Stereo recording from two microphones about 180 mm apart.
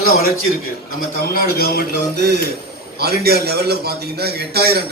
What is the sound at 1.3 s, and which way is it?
Speech, 55° left (ahead or behind).